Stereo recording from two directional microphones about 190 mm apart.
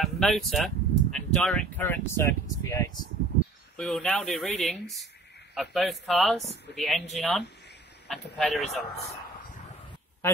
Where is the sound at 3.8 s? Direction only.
5° left (ahead or behind).